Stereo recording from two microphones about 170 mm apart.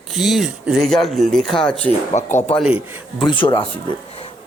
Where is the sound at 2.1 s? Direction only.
40° left (ahead or behind).